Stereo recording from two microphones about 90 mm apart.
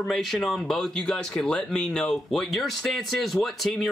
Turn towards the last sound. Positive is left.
turn(degrees=0)  # may be behind; listen again after turning